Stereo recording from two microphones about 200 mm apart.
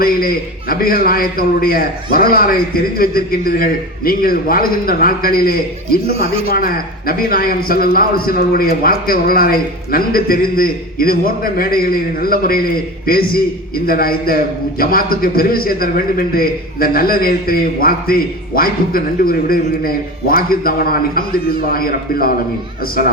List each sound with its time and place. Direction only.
0.0 s a man's voice: 45° left (ahead or behind)
6.1 s speech: 30° right (ahead or behind)
6.5 s a man's voice: 50° left (ahead or behind)